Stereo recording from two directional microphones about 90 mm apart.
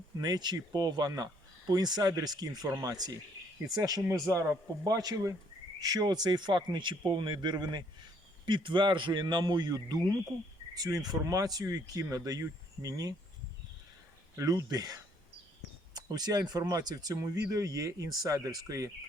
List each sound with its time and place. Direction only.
0.2 s speech: 50° right (ahead or behind); by 4.9 s 35° right (ahead or behind)
4.9 s a man's voice: 45° right (ahead or behind)
11.3 s speech: 40° right (ahead or behind)
14.3 s speech: 40° right (ahead or behind)